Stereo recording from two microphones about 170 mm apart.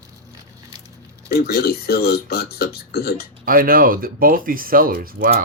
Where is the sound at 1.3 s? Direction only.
65° left (ahead or behind).